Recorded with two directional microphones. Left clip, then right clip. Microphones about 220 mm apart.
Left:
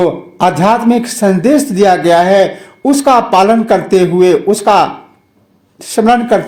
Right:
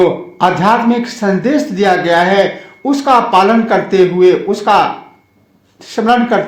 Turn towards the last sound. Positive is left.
turn(degrees=45)  # may be behind; listen again after turning